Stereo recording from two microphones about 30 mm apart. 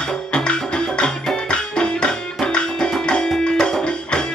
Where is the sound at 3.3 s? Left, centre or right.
Centre.